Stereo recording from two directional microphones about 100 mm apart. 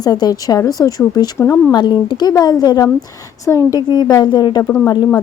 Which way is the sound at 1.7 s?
45° left (ahead or behind).